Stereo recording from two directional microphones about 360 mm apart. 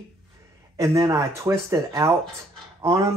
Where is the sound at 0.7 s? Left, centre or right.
Centre.